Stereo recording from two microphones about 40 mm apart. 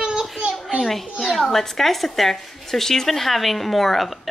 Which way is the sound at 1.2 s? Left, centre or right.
Centre.